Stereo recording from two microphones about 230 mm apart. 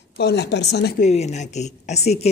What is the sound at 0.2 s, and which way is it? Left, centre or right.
Speech, left.